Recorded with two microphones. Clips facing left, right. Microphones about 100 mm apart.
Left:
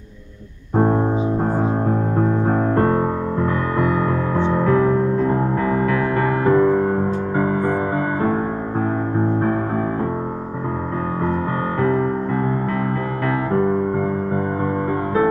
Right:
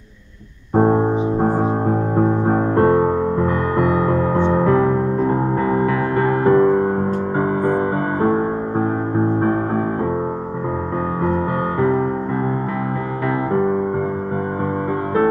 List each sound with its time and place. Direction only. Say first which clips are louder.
0.7 s music: right 2 dB; 20° right (ahead or behind)